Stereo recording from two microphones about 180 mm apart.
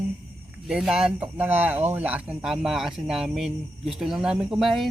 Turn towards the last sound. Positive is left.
turn(degrees=0)  # may be behind; listen again after turning